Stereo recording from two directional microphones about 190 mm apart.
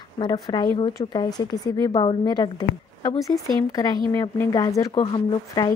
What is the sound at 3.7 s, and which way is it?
A woman's voice, 20° left (ahead or behind).